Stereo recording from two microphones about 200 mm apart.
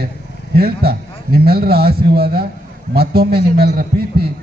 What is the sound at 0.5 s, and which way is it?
A man's voice, 50° right (ahead or behind).